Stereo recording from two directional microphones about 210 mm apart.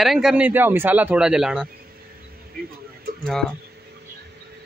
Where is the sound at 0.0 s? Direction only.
Centre (ahead or behind).